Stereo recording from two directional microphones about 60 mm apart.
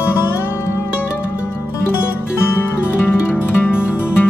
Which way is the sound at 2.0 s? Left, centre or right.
Left.